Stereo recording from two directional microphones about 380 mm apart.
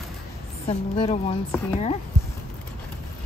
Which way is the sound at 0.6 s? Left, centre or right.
Centre.